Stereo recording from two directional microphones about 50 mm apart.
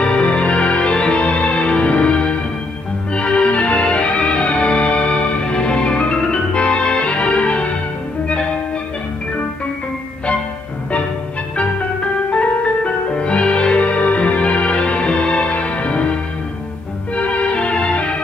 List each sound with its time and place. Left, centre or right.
0.0 s music: left
12.3 s music: left
17.1 s music: left